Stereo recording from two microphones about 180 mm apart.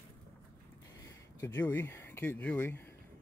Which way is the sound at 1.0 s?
15° left (ahead or behind).